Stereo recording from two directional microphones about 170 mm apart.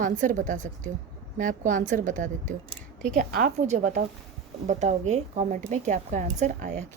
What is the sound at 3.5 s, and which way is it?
A woman's voice, 45° right (ahead or behind).